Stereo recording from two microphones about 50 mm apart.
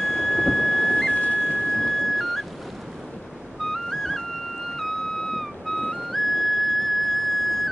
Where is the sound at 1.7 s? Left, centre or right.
Centre.